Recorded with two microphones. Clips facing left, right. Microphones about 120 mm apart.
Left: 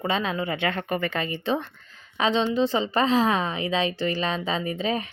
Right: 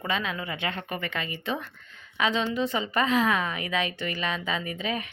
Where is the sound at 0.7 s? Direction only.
50° left (ahead or behind).